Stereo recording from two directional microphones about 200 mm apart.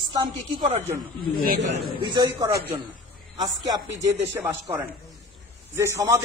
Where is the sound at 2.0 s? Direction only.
20° right (ahead or behind).